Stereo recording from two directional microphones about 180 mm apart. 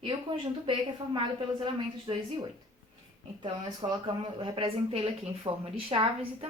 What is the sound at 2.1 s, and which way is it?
Speech, 30° right (ahead or behind).